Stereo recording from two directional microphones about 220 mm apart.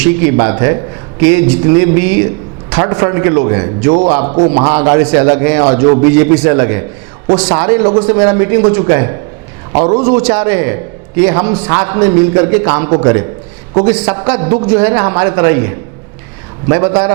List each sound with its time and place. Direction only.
0.0 s a man's voice: 10° right (ahead or behind)
4.3 s a man's voice: 25° right (ahead or behind)
4.7 s a man's voice: 10° right (ahead or behind)